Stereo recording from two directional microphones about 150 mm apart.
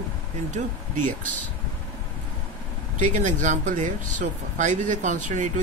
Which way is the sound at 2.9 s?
55° right (ahead or behind).